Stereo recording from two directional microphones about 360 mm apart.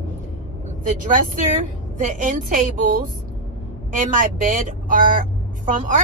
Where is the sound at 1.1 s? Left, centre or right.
Right.